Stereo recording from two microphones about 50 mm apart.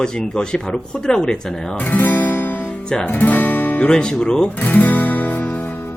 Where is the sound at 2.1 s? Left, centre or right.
Left.